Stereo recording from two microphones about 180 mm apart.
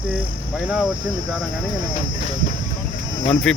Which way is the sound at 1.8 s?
25° right (ahead or behind).